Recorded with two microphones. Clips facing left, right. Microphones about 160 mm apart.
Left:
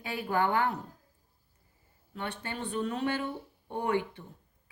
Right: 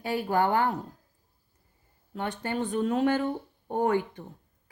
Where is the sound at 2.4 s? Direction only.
45° right (ahead or behind).